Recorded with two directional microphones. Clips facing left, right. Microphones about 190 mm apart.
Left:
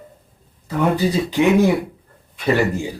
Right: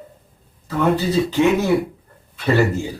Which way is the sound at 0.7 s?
15° left (ahead or behind).